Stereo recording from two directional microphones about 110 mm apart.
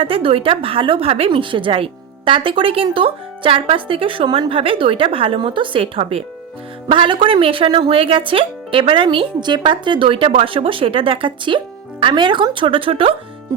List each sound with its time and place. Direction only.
0.0 s a woman's voice: 60° right (ahead or behind)
6.9 s speech: 50° right (ahead or behind)